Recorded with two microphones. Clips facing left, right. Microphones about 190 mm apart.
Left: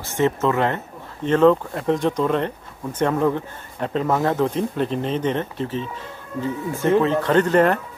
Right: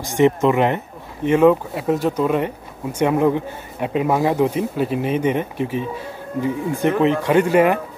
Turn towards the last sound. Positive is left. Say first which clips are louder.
# right 2 dB
turn(degrees=-10)  # may be behind; listen again after turning